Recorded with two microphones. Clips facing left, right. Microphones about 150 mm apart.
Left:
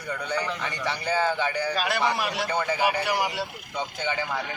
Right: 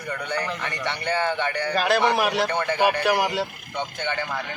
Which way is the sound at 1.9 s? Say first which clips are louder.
Right 5 dB; 85° right.